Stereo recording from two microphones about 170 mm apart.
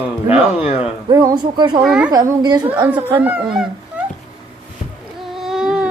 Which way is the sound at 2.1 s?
25° right (ahead or behind).